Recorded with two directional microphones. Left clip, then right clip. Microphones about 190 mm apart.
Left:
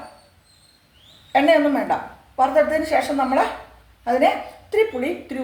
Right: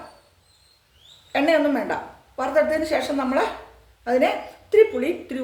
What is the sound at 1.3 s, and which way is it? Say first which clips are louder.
Speech: left 3 dB; 20° right (ahead or behind).